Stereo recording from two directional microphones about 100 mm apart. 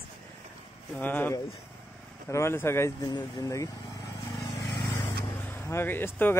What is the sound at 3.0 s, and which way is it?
Speech, 40° left (ahead or behind).